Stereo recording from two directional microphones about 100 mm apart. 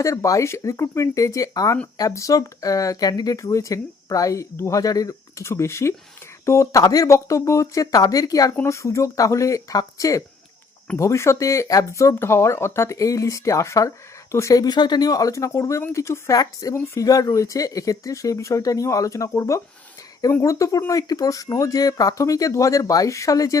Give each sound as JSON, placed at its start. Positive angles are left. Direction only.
{"t": 0.0, "sound": "speech", "side_deg": 30}